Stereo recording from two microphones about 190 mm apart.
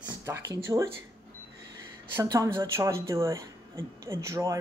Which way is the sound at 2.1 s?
20° right (ahead or behind).